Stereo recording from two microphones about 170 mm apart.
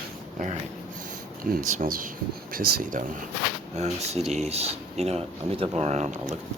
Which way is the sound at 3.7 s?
40° right (ahead or behind).